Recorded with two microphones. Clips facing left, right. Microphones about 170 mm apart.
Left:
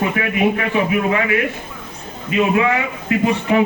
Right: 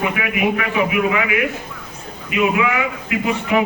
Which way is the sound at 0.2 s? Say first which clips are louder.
Left 2 dB; 35° left (ahead or behind).